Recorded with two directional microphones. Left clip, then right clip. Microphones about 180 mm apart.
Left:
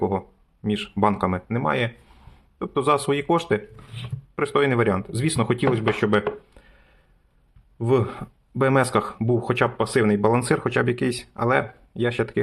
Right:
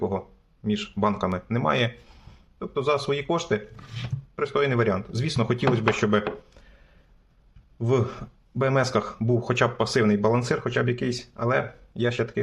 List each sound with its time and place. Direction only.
0.6 s speech: 20° left (ahead or behind)
2.6 s speech: 25° left (ahead or behind)
7.8 s speech: 15° left (ahead or behind)